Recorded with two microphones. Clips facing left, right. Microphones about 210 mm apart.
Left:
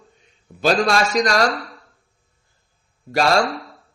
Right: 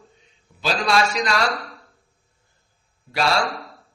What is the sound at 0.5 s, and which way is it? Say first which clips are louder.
Speech: left 4 dB; 45° left (ahead or behind).